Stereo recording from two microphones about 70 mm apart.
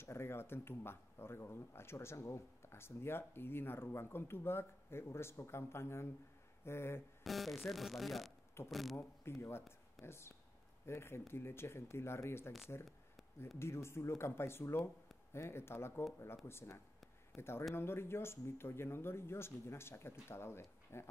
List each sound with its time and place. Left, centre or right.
0.0 s speech: left
7.2 s speech: centre
8.9 s speech: left
13.6 s speech: left